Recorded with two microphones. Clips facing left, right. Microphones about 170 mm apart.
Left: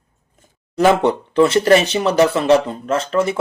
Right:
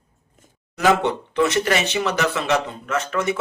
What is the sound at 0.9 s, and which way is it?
Speech, 30° left (ahead or behind).